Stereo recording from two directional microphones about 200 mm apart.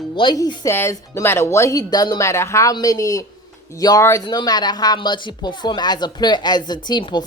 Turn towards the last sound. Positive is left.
turn(degrees=20)  # may be behind; listen again after turning